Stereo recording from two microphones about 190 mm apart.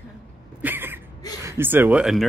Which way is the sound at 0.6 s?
10° right (ahead or behind).